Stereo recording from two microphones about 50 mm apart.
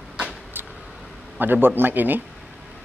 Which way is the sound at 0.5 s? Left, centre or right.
Right.